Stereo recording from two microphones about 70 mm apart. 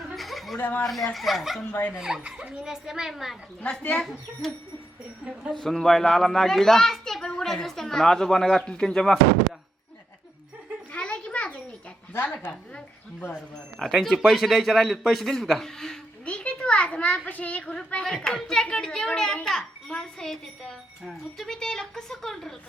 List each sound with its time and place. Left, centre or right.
0.1 s chuckle: centre
0.6 s a woman's voice: left
1.1 s a woman's voice: centre
3.6 s a child's voice: centre
5.2 s a woman's voice: centre
5.5 s a child's voice: centre
10.9 s a sound: centre
12.2 s a woman's voice: left
13.7 s a man's voice: centre
21.4 s a child's voice: centre